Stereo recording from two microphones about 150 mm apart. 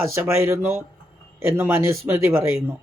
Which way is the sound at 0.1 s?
15° right (ahead or behind).